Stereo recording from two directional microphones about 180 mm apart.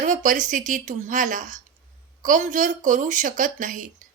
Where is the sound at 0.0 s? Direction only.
45° right (ahead or behind).